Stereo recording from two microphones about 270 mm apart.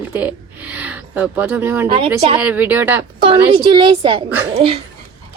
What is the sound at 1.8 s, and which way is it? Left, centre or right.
Speech, centre.